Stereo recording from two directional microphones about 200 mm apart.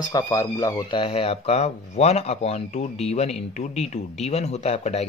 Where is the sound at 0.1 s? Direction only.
15° left (ahead or behind).